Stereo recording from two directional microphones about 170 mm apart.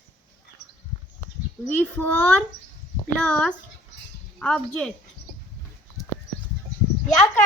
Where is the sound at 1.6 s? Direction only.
10° left (ahead or behind).